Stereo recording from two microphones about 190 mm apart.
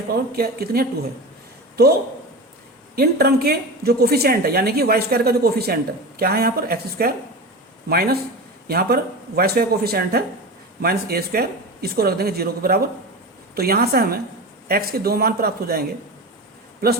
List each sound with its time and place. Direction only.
0.1 s a woman's voice: 55° right (ahead or behind)